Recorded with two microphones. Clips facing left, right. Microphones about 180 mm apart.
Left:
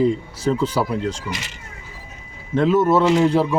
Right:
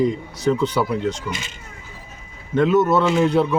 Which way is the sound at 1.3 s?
75° left (ahead or behind).